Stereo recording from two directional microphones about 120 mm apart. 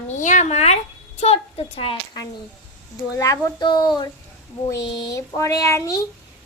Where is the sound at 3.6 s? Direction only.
40° left (ahead or behind).